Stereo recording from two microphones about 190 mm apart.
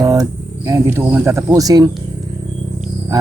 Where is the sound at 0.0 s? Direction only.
20° right (ahead or behind).